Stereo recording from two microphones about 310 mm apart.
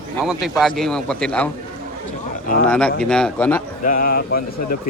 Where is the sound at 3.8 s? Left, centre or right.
Left.